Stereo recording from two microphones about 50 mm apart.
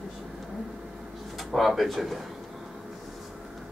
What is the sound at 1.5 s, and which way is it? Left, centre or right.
Speech, centre.